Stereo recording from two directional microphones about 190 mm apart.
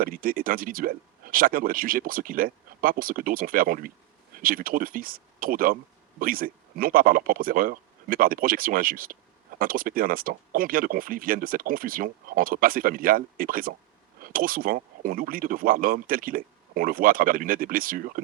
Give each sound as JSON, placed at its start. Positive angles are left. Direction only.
{"t": 0.0, "sound": "speech", "side_deg": -50}